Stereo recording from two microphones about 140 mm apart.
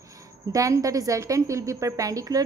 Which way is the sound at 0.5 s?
25° right (ahead or behind).